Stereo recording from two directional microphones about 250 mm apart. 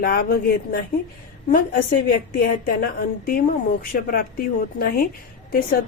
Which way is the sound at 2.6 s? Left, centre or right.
Left.